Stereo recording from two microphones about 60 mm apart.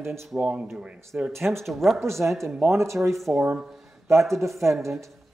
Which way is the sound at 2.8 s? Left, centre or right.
Right.